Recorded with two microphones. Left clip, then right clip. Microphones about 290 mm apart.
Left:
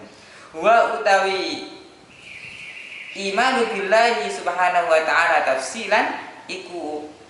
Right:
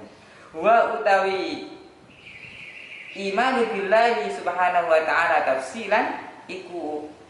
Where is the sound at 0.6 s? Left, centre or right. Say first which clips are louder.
Left 2 dB; centre.